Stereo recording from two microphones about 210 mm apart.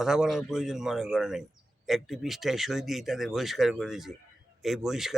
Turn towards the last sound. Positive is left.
turn(degrees=0)  # may be behind; listen again after turning